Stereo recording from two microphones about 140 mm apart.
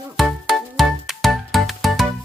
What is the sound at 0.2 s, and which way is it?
Music, centre (ahead or behind).